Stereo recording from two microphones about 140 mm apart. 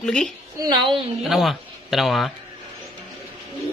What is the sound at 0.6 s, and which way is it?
Speech, 30° right (ahead or behind).